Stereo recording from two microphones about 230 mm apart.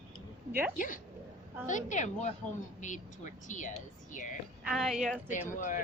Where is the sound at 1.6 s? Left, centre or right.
Left.